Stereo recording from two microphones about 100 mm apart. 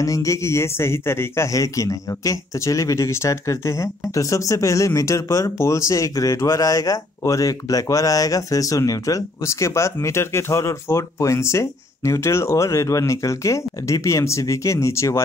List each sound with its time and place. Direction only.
0.0 s speech: 30° left (ahead or behind)